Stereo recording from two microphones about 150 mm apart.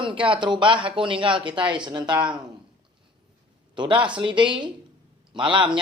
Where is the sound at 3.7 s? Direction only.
30° right (ahead or behind).